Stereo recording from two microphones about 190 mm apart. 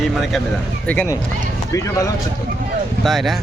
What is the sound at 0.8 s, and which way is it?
Speech, 5° left (ahead or behind).